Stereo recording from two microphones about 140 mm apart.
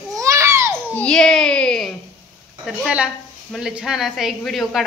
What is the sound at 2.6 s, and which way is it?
A woman's voice, 5° right (ahead or behind).